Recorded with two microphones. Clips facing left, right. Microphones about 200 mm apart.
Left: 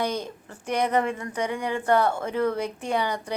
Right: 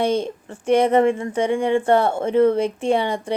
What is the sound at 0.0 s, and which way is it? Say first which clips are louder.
A woman's voice: right 8 dB; 25° right (ahead or behind).